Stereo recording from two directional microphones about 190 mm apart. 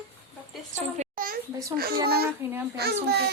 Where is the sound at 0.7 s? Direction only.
45° right (ahead or behind).